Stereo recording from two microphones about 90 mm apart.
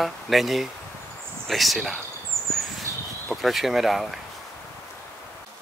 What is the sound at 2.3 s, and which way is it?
Bird, 30° right (ahead or behind).